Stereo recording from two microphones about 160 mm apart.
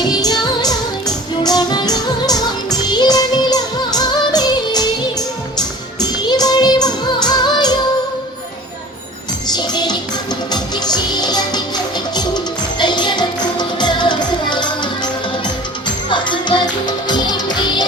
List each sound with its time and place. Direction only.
0.0 s music: 25° left (ahead or behind)
9.5 s music: 25° left (ahead or behind)
16.0 s music: 30° left (ahead or behind)